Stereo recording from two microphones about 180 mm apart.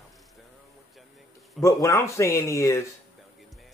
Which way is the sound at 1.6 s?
15° left (ahead or behind).